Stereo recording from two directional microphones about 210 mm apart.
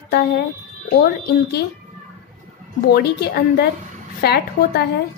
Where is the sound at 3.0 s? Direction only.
50° left (ahead or behind).